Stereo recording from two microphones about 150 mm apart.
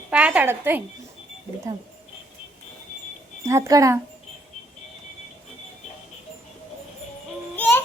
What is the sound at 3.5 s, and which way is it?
Speech, 20° right (ahead or behind).